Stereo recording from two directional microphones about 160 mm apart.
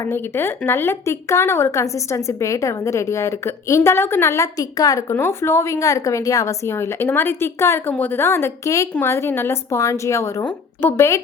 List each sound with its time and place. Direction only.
0.0 s a woman's voice: 15° left (ahead or behind)